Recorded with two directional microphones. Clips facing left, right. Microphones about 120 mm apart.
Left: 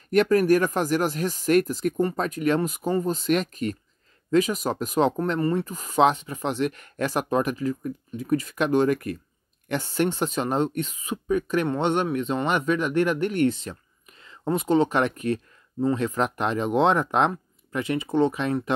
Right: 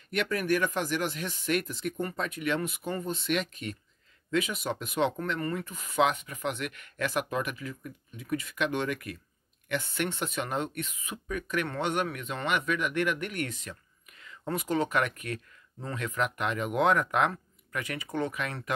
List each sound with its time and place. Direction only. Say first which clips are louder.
0.1 s speech: left 10 dB; 40° left (ahead or behind)